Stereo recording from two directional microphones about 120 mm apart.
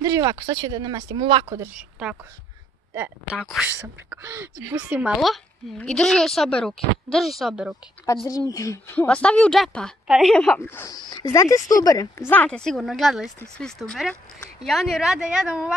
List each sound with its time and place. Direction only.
0.0 s speech: 30° right (ahead or behind)
1.4 s speech: 25° right (ahead or behind)
1.8 s speech: 10° right (ahead or behind)
2.9 s speech: 20° right (ahead or behind)
3.3 s speech: 5° right (ahead or behind)
5.1 s speech: centre (ahead or behind)
8.3 s speech: 30° left (ahead or behind)
8.9 s a woman's voice: 10° left (ahead or behind)
10.9 s speech: 35° left (ahead or behind)
12.3 s speech: 10° left (ahead or behind); by 15.7 s 10° right (ahead or behind)